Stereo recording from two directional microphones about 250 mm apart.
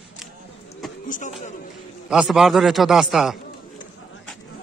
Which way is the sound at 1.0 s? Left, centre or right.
Left.